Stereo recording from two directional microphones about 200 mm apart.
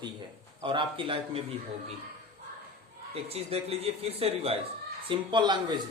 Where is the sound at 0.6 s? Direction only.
25° right (ahead or behind).